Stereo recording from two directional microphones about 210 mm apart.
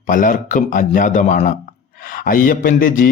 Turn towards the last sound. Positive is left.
turn(degrees=40)  # may be behind; listen again after turning